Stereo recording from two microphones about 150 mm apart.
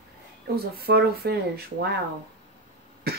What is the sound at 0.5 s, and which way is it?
Speech, 90° right.